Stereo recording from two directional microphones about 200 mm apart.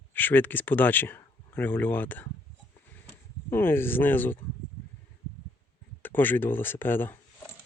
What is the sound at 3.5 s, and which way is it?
Speech, 10° left (ahead or behind).